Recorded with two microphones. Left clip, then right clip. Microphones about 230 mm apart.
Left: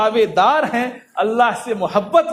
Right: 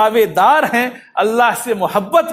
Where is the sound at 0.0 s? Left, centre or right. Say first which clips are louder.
Right 3 dB; right.